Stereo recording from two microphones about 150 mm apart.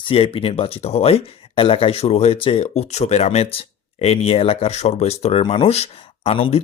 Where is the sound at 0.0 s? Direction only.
40° left (ahead or behind).